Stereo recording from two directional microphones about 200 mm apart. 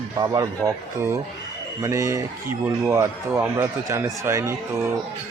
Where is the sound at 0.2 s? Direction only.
15° right (ahead or behind).